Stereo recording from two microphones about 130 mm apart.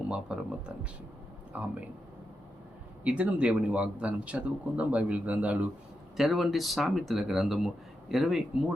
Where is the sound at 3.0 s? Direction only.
10° right (ahead or behind).